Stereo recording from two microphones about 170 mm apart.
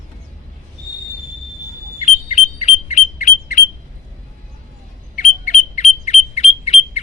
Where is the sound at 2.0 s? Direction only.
40° left (ahead or behind).